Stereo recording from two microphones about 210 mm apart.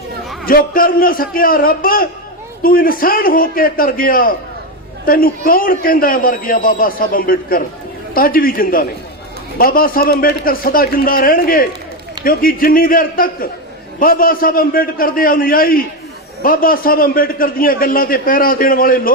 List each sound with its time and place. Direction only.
0.4 s a man's voice: 45° left (ahead or behind)